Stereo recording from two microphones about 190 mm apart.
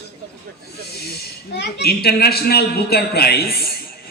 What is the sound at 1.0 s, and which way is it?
A man's voice, 60° left (ahead or behind).